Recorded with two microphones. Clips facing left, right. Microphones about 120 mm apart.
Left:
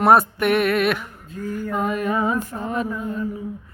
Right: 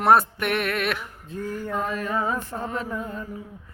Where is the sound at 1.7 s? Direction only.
15° left (ahead or behind).